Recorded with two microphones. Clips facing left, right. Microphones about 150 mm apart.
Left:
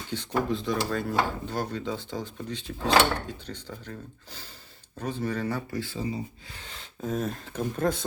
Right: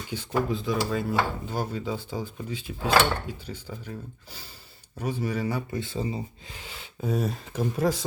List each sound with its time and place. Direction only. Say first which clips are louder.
0.1 s dishes: even; 5° right (ahead or behind)
5.7 s speech: right 1 dB; 25° right (ahead or behind)
6.6 s speech: right 1 dB; 5° right (ahead or behind)